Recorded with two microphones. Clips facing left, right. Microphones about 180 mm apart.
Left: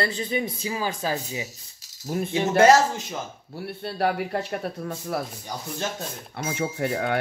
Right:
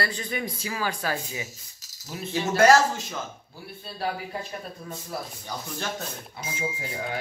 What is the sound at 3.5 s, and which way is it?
Speech, 70° left (ahead or behind).